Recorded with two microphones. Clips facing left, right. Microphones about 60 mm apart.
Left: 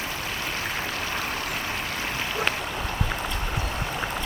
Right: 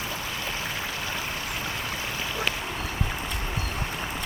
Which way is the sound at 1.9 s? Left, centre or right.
Left.